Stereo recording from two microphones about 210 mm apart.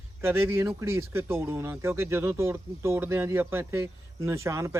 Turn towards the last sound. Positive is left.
turn(degrees=-15)  # may be behind; listen again after turning